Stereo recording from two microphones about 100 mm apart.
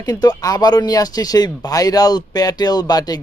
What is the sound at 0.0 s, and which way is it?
Speech, 40° left (ahead or behind).